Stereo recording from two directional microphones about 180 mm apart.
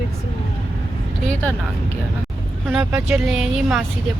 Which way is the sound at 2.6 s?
5° right (ahead or behind).